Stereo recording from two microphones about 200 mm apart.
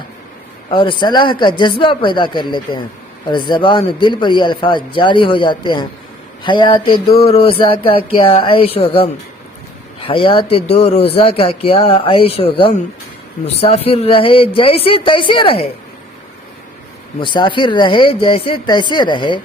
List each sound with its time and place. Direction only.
0.7 s speech: 25° left (ahead or behind)
17.2 s speech: 25° left (ahead or behind)